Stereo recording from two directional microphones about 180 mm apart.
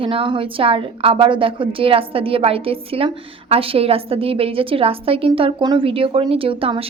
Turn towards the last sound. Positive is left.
turn(degrees=-30)  # may be behind; listen again after turning